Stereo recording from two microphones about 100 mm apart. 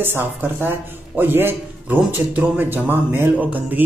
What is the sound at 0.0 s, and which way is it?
A man's voice, 20° right (ahead or behind).